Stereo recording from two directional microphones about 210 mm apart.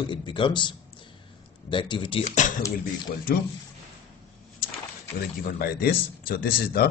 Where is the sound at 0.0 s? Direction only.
20° left (ahead or behind).